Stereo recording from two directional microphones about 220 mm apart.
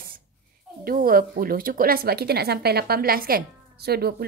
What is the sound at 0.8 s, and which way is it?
Speech, 40° right (ahead or behind).